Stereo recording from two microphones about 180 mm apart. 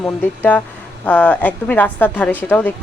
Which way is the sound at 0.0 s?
10° left (ahead or behind).